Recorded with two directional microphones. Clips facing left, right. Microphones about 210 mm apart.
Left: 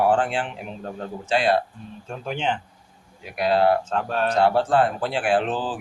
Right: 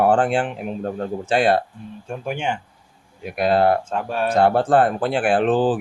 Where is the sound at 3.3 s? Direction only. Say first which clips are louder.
Right 2 dB; 50° right (ahead or behind).